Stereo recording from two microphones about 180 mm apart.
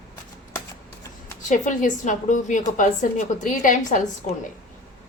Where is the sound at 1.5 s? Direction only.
45° left (ahead or behind).